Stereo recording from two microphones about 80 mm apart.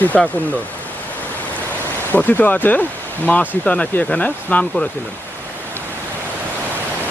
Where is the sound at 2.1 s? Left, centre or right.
Left.